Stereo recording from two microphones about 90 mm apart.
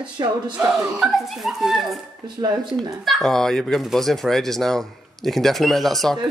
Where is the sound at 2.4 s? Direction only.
55° right (ahead or behind).